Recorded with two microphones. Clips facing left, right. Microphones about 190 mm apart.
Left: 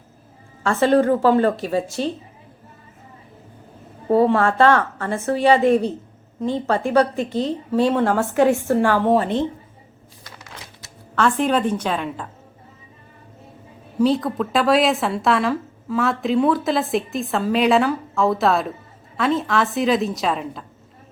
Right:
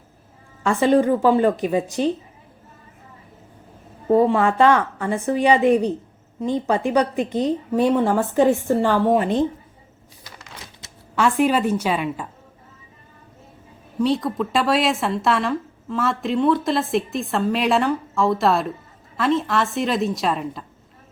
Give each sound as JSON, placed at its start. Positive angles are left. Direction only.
{"t": 0.6, "sound": "a woman's voice", "side_deg": -15}
{"t": 4.2, "sound": "a woman's voice", "side_deg": -15}
{"t": 11.1, "sound": "a woman's voice", "side_deg": -10}
{"t": 14.0, "sound": "speech", "side_deg": 0}